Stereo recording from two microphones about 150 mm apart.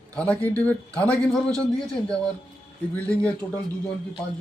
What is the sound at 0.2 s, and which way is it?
A man's voice, 10° left (ahead or behind).